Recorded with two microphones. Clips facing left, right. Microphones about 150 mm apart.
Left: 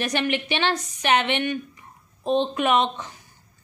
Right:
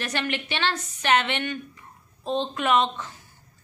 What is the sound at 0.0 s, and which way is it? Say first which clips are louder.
A woman's voice: left 4 dB; 15° left (ahead or behind).